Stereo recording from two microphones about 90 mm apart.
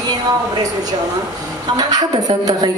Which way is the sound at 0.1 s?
45° right (ahead or behind).